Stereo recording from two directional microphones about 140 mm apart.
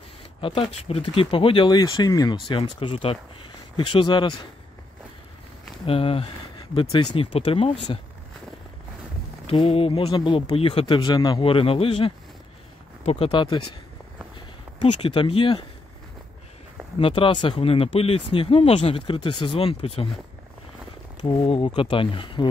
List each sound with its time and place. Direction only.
0.4 s speech: 45° left (ahead or behind)
5.9 s speech: 40° left (ahead or behind)
9.5 s speech: 40° left (ahead or behind)
15.0 s speech: 40° left (ahead or behind)
17.0 s speech: 40° left (ahead or behind)
21.2 s speech: 40° left (ahead or behind)